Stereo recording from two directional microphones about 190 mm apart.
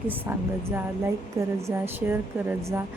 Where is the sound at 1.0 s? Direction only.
15° right (ahead or behind).